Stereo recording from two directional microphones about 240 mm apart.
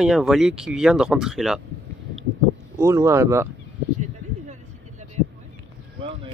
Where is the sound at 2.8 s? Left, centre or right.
Centre.